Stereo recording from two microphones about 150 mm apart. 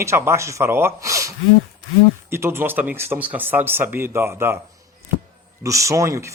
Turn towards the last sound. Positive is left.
turn(degrees=-20)  # may be behind; listen again after turning